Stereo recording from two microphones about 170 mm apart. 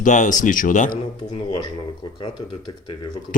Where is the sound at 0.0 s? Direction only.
45° left (ahead or behind).